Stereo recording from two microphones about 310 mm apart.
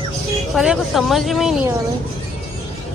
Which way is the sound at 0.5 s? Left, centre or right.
Centre.